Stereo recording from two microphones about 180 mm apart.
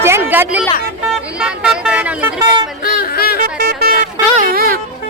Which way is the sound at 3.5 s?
60° right (ahead or behind).